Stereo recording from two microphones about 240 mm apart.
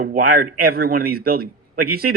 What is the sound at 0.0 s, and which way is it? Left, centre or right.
Speech, right.